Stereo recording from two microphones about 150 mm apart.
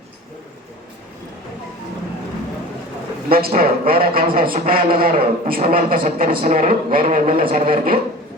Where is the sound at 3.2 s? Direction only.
80° right.